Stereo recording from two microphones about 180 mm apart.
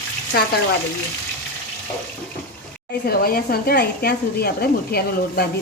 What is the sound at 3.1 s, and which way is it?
Speech, 55° left (ahead or behind).